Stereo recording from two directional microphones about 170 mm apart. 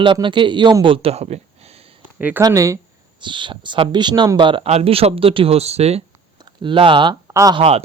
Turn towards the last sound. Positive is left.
turn(degrees=-35)  # may be behind; listen again after turning